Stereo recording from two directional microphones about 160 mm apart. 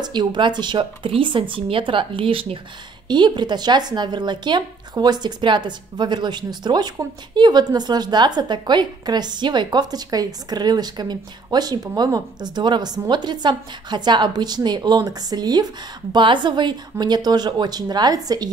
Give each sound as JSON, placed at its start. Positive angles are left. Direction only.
{"t": 0.0, "sound": "a woman's voice", "side_deg": -25}